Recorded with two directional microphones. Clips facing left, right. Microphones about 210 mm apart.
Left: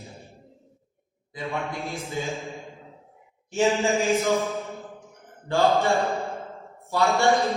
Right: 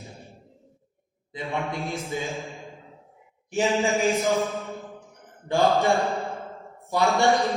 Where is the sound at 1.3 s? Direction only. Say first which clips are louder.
Right 1 dB; 15° right (ahead or behind).